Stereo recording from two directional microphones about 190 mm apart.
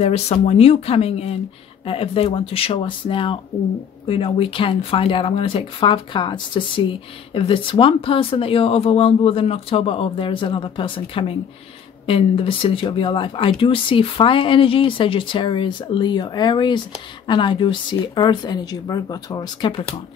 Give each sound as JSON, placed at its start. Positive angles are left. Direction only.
{"t": 0.0, "sound": "speech", "side_deg": 35}